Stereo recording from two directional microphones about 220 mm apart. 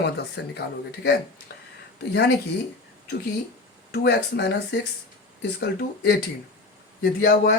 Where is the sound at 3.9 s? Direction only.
50° left (ahead or behind).